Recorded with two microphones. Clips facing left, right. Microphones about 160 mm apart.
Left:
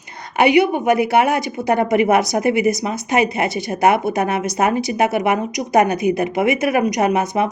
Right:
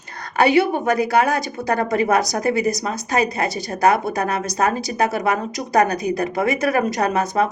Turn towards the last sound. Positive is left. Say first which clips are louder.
# left 2 dB
turn(degrees=20)  # may be behind; listen again after turning